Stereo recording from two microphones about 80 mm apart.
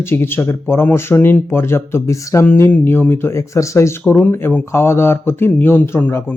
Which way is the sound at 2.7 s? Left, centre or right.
Left.